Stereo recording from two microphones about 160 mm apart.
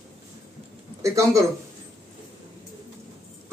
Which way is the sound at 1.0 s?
20° right (ahead or behind).